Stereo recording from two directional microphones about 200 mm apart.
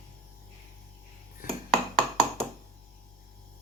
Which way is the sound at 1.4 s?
45° left (ahead or behind).